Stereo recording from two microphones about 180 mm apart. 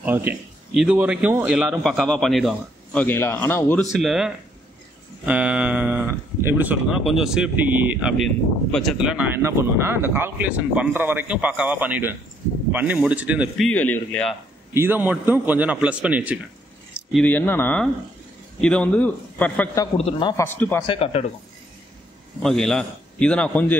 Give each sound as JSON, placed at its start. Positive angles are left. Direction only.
{"t": 0.0, "sound": "a man's voice", "side_deg": -10}
{"t": 3.9, "sound": "a man's voice", "side_deg": -5}
{"t": 13.7, "sound": "a man's voice", "side_deg": 10}
{"t": 14.7, "sound": "speech", "side_deg": -10}
{"t": 16.9, "sound": "a man's voice", "side_deg": 5}
{"t": 20.1, "sound": "a man's voice", "side_deg": 25}
{"t": 20.3, "sound": "a man's voice", "side_deg": 10}
{"t": 20.8, "sound": "speech", "side_deg": 30}
{"t": 22.4, "sound": "a man's voice", "side_deg": 5}